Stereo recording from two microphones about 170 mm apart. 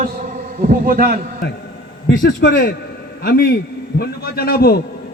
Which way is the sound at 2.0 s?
75° left (ahead or behind).